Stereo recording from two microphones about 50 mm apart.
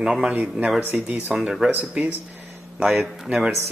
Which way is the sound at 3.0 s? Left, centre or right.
Centre.